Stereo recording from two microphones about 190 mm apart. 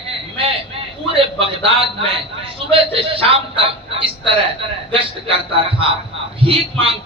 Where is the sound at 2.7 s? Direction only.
30° right (ahead or behind).